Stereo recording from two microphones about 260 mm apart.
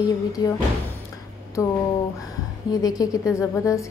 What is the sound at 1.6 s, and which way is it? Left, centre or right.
A woman's voice, centre.